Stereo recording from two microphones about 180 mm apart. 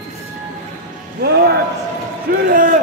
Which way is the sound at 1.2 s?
65° right (ahead or behind).